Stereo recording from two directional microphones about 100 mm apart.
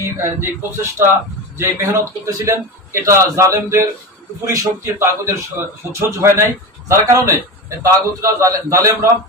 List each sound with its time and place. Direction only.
0.0 s a man's voice: 25° right (ahead or behind)